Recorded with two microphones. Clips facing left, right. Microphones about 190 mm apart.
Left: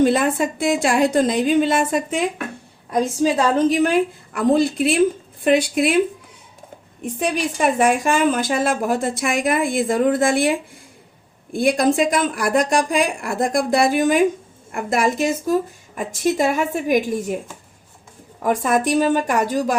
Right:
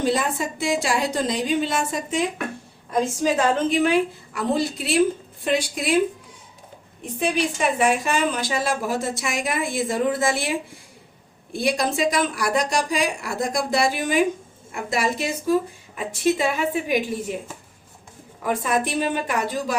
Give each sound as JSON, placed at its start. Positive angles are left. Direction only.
{"t": 0.0, "sound": "a woman's voice", "side_deg": 55}
{"t": 2.9, "sound": "a woman's voice", "side_deg": 40}
{"t": 7.2, "sound": "a woman's voice", "side_deg": 50}
{"t": 11.5, "sound": "a woman's voice", "side_deg": 50}
{"t": 18.4, "sound": "a woman's voice", "side_deg": 45}